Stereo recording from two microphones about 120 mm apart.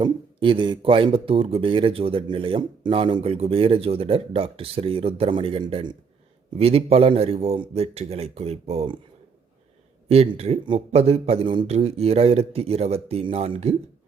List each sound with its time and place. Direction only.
0.0 s speech: 45° right (ahead or behind)
6.6 s speech: 55° right (ahead or behind)
10.1 s speech: 60° right (ahead or behind)